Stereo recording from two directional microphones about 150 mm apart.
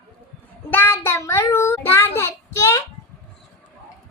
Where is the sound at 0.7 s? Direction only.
15° left (ahead or behind).